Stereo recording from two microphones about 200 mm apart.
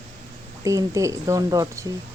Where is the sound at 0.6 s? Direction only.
15° right (ahead or behind).